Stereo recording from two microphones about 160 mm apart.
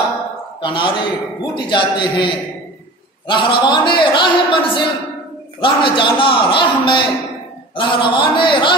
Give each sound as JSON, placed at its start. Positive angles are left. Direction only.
{"t": 0.6, "sound": "a man's voice", "side_deg": 30}